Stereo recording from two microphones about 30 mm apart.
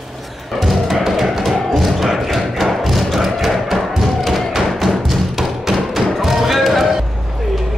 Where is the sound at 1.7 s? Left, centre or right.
Centre.